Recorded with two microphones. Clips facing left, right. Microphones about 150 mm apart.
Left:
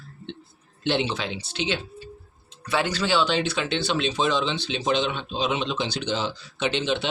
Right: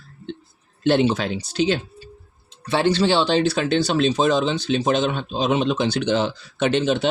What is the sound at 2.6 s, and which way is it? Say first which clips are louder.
Speech: right 6 dB; 30° right (ahead or behind).